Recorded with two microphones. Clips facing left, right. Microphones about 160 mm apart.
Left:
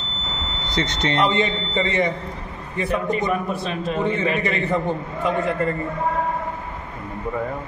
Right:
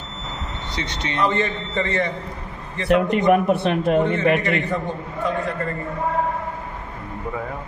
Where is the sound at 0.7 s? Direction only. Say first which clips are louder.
Left 6 dB; 50° left (ahead or behind).